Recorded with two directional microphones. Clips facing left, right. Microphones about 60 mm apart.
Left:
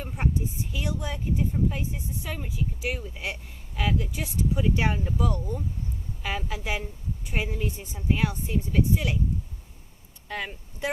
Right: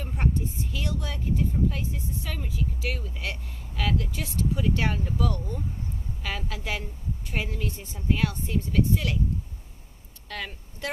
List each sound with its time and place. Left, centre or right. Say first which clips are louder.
0.0 s a woman's voice: even; centre
10.2 s speech: left 2 dB; centre